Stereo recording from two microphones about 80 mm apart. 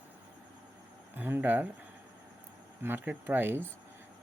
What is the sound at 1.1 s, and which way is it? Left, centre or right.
Speech, right.